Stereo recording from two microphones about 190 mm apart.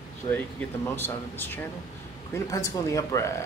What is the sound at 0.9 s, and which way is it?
Speech, 10° left (ahead or behind).